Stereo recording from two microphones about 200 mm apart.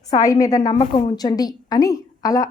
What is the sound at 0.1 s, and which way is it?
A woman's voice, 15° left (ahead or behind).